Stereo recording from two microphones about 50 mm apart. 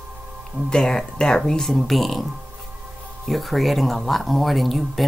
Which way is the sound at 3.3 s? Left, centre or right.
Centre.